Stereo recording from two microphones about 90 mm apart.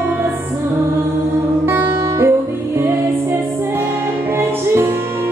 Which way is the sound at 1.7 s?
25° right (ahead or behind).